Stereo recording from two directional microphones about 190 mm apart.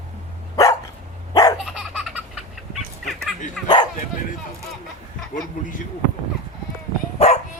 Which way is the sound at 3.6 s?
25° left (ahead or behind).